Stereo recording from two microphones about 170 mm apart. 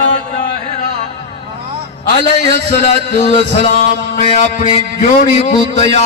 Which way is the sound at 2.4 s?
45° left (ahead or behind).